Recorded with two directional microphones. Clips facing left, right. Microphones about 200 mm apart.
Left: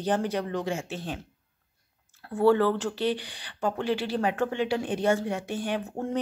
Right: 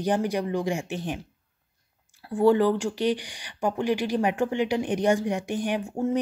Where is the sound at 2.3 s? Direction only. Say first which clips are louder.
Right 2 dB; 15° right (ahead or behind).